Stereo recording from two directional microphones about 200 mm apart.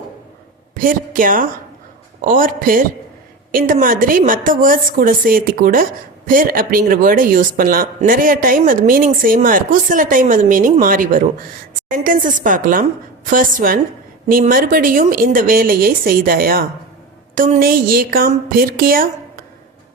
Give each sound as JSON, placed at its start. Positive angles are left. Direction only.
{"t": 0.7, "sound": "a woman's voice", "side_deg": -45}